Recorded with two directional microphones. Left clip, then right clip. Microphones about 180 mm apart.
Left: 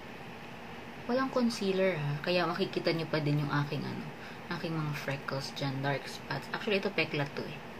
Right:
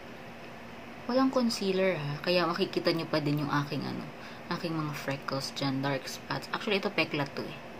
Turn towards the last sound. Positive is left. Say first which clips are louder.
# right 2 dB
turn(degrees=-20)  # may be behind; listen again after turning